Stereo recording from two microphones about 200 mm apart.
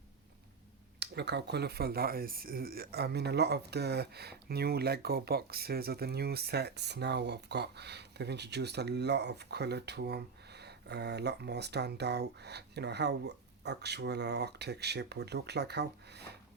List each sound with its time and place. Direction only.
0.9 s speech: 55° right (ahead or behind)